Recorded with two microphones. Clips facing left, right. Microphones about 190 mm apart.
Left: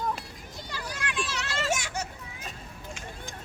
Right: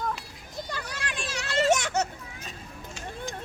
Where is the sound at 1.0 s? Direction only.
35° right (ahead or behind).